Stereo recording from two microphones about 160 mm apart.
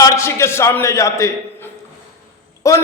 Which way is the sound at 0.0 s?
15° left (ahead or behind).